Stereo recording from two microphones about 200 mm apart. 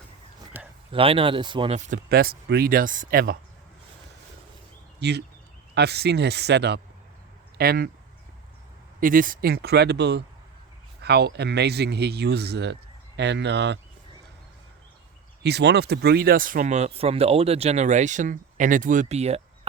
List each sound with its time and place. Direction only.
0.9 s speech: 25° right (ahead or behind)
2.0 s speech: 50° right (ahead or behind)
4.9 s speech: 55° right (ahead or behind)
9.0 s speech: 45° right (ahead or behind); by 13.7 s 60° right (ahead or behind)
15.4 s speech: 55° right (ahead or behind); by 19.4 s 30° right (ahead or behind)